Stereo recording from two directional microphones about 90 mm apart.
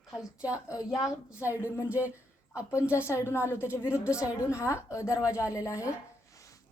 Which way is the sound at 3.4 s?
15° right (ahead or behind).